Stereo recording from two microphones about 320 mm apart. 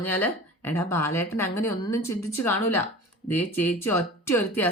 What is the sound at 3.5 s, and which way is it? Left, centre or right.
Speech, centre.